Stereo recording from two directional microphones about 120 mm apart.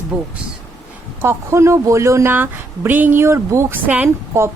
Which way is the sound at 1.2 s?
20° right (ahead or behind).